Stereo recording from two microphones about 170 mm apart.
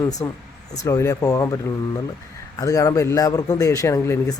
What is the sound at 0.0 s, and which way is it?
Speech, 20° left (ahead or behind).